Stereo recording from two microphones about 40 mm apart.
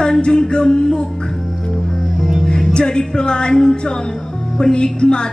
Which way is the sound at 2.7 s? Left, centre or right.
Left.